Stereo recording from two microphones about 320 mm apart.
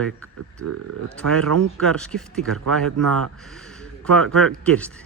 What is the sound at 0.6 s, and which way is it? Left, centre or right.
Speech, right.